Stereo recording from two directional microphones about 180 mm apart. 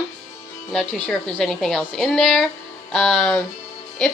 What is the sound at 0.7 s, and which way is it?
A woman's voice, 5° left (ahead or behind).